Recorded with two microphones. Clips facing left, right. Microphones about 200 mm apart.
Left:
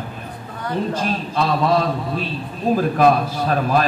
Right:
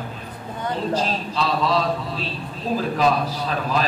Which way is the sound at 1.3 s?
55° left (ahead or behind).